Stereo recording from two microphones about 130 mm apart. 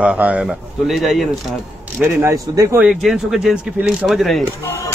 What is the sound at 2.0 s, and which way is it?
Speech, 20° right (ahead or behind).